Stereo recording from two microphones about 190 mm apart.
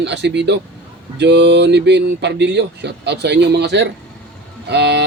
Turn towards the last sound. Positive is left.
turn(degrees=-60)  # may be behind; listen again after turning